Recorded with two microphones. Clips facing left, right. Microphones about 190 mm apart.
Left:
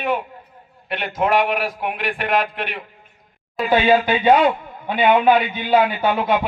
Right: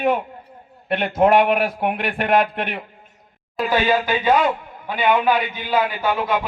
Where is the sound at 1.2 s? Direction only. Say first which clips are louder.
Right 3 dB; 50° right (ahead or behind).